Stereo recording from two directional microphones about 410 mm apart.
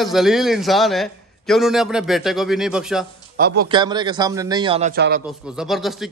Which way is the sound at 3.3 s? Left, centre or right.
Right.